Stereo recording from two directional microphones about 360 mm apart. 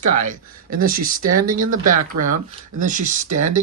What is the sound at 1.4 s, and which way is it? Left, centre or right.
Speech, right.